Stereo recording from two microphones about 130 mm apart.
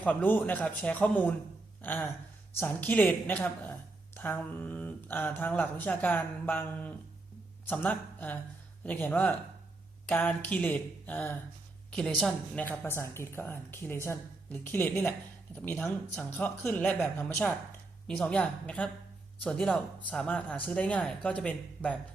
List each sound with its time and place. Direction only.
0.0 s a woman's voice: 10° left (ahead or behind)